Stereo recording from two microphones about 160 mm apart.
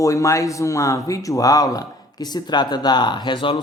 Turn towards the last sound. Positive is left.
turn(degrees=30)  # may be behind; listen again after turning